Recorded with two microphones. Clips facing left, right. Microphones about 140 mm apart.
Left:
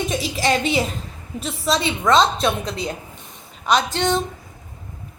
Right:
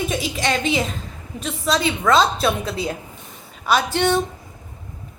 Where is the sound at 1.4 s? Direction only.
Centre (ahead or behind).